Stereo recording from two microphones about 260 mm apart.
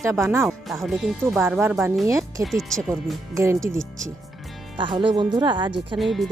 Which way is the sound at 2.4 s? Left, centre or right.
Centre.